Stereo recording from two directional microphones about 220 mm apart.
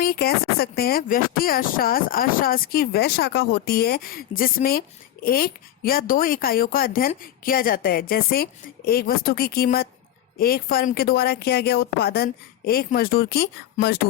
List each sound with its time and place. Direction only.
0.0 s speech: 45° left (ahead or behind)